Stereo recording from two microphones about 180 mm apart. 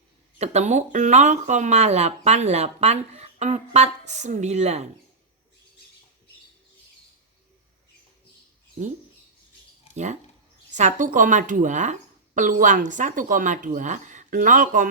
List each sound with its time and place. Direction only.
0.3 s speech: 35° right (ahead or behind)
9.9 s speech: 40° right (ahead or behind)